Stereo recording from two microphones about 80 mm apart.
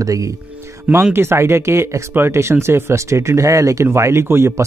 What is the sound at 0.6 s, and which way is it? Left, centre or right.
Music, right.